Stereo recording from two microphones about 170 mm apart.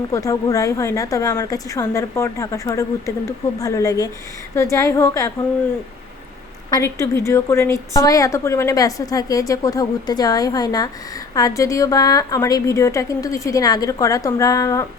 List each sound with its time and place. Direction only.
0.1 s a woman's voice: 20° left (ahead or behind)
6.7 s a woman's voice: 20° left (ahead or behind)